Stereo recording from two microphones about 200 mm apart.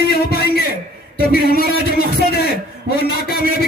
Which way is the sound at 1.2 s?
50° left (ahead or behind).